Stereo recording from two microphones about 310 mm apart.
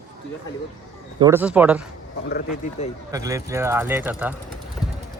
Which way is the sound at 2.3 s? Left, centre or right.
Left.